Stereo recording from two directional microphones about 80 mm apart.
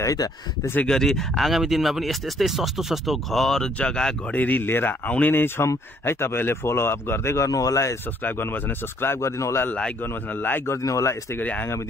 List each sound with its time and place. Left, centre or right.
0.0 s speech: left
0.8 s speech: centre
4.4 s speech: left
7.4 s speech: left
8.2 s speech: left
9.7 s speech: centre
10.0 s speech: left
10.7 s speech: left
11.3 s speech: left